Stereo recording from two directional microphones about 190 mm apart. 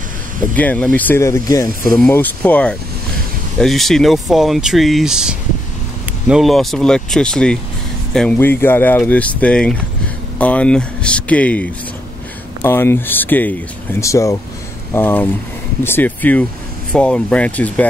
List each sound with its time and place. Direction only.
0.6 s speech: 5° left (ahead or behind)